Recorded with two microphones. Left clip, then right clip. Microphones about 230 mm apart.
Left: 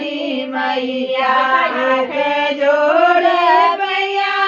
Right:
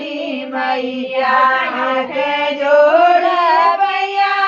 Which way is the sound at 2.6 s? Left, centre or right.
Right.